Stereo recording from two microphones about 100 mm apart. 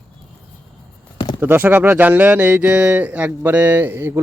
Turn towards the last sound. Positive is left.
turn(degrees=-20)  # may be behind; listen again after turning